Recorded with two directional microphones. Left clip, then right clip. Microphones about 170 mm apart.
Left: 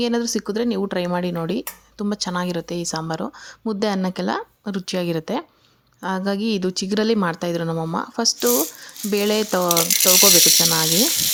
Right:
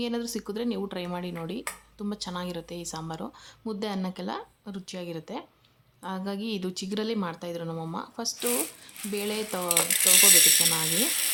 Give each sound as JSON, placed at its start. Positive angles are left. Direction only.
{"t": 0.0, "sound": "speech", "side_deg": 35}